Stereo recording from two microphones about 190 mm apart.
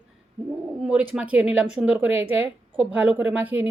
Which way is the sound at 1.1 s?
5° right (ahead or behind).